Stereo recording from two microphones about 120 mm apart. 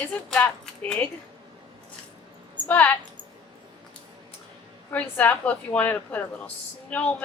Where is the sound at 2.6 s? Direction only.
15° left (ahead or behind).